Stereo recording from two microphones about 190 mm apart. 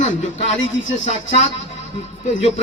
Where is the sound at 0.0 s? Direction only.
35° left (ahead or behind).